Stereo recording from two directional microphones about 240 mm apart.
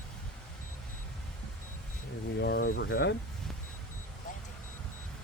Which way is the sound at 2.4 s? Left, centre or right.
Left.